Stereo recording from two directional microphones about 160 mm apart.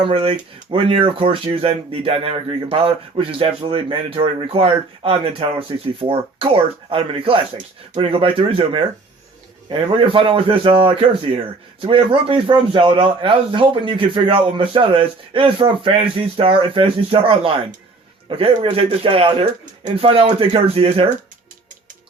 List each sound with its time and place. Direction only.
0.0 s speech: 35° right (ahead or behind)